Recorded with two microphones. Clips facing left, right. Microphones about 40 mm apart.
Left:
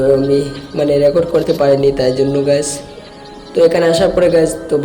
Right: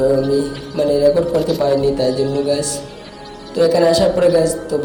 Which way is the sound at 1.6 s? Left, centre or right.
Left.